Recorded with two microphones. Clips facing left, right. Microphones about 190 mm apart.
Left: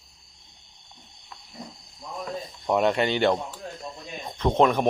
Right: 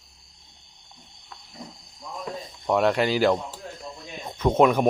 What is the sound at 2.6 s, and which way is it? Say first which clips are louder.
Speech: right 1 dB; centre (ahead or behind).